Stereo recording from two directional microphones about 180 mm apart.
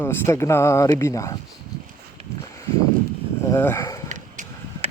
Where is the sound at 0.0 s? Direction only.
15° left (ahead or behind).